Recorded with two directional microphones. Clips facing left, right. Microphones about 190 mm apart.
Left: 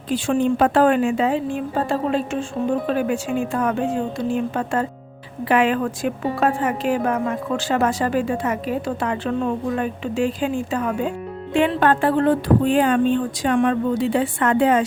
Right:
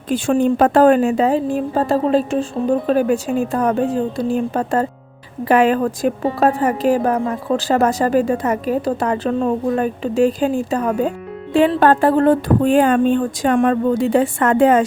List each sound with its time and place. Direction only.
0.1 s a woman's voice: 45° right (ahead or behind)